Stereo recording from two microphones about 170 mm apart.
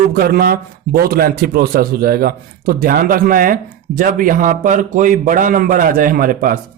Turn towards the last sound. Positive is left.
turn(degrees=-55)  # may be behind; listen again after turning